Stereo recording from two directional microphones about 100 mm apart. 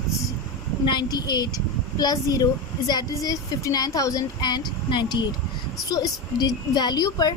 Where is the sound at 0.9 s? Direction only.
45° left (ahead or behind).